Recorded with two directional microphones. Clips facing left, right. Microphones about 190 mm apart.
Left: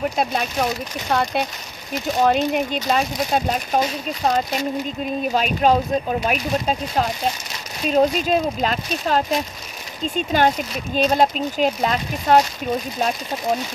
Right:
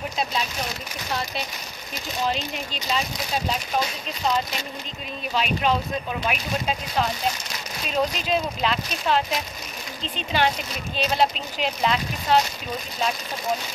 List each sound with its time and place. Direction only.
0.2 s speech: 55° left (ahead or behind)
5.3 s speech: 45° left (ahead or behind)